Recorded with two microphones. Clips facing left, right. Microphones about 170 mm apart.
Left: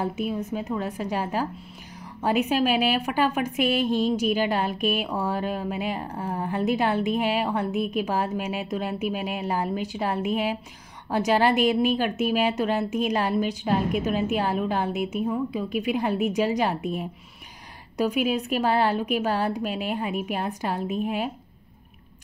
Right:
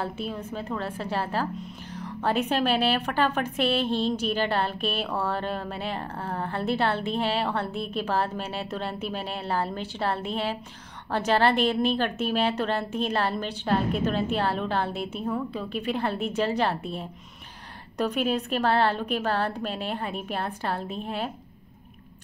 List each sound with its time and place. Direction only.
0.0 s a woman's voice: 10° left (ahead or behind)
17.9 s a woman's voice: 10° left (ahead or behind)